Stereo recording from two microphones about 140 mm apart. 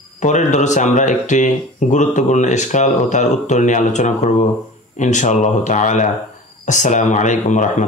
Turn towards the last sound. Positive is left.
turn(degrees=60)  # may be behind; listen again after turning